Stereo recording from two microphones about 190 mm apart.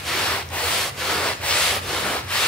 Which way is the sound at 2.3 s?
5° left (ahead or behind).